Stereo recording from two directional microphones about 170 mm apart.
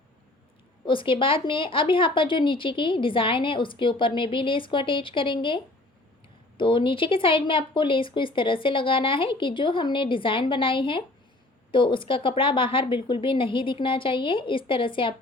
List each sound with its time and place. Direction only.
0.9 s speech: 30° left (ahead or behind)
6.6 s speech: 30° left (ahead or behind)